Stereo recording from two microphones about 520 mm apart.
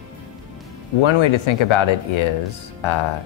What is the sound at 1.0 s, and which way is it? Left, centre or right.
Speech, left.